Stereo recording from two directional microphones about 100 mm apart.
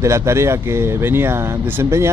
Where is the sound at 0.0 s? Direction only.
30° right (ahead or behind).